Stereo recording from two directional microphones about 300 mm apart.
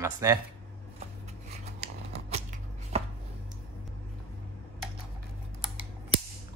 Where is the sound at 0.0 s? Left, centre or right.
Centre.